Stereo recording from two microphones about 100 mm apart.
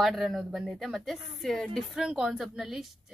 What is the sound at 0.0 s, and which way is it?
A woman's voice, centre (ahead or behind).